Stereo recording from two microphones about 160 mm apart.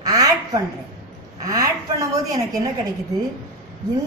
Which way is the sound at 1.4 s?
20° right (ahead or behind).